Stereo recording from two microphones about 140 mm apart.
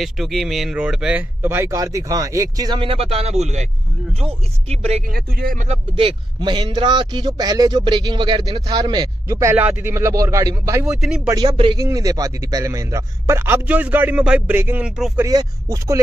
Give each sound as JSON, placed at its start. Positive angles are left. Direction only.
{"t": 0.0, "sound": "a man's voice", "side_deg": 0}
{"t": 5.0, "sound": "speech", "side_deg": -90}
{"t": 5.7, "sound": "speech", "side_deg": -40}
{"t": 9.6, "sound": "a man's voice", "side_deg": -10}
{"t": 10.9, "sound": "speech", "side_deg": -5}
{"t": 11.2, "sound": "a man's voice", "side_deg": -30}
{"t": 11.5, "sound": "speech", "side_deg": -40}
{"t": 11.8, "sound": "a man's voice", "side_deg": -25}
{"t": 15.1, "sound": "a man's voice", "side_deg": -25}